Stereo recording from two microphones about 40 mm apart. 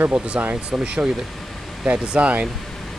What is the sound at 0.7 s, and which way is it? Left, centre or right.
Speech, right.